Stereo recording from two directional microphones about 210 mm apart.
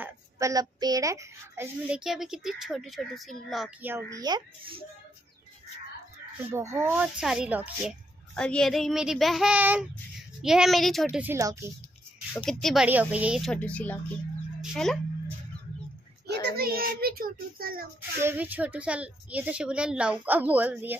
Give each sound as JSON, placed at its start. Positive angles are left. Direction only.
{"t": 0.0, "sound": "a woman's voice", "side_deg": -15}
{"t": 6.5, "sound": "a woman's voice", "side_deg": -15}
{"t": 11.3, "sound": "a woman's voice", "side_deg": -15}
{"t": 12.4, "sound": "a woman's voice", "side_deg": 0}
{"t": 14.6, "sound": "a sound", "side_deg": 0}
{"t": 16.3, "sound": "a child's voice", "side_deg": -55}
{"t": 18.2, "sound": "a woman's voice", "side_deg": -10}